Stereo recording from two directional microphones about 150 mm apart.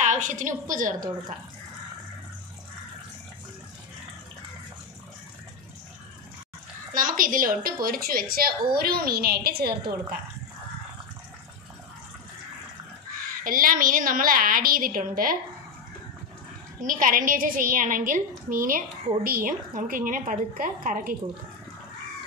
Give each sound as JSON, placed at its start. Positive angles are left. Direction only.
{"t": 0.0, "sound": "a woman's voice", "side_deg": -55}
{"t": 6.9, "sound": "a woman's voice", "side_deg": -65}
{"t": 13.4, "sound": "a woman's voice", "side_deg": -65}
{"t": 16.8, "sound": "a woman's voice", "side_deg": -65}